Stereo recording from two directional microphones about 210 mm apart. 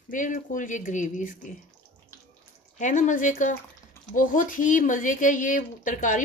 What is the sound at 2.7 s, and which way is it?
Speech, 35° left (ahead or behind).